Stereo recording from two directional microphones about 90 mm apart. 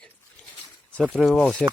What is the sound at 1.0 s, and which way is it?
Speech, 5° left (ahead or behind).